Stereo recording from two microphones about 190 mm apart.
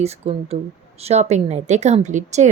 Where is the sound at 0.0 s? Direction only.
35° right (ahead or behind).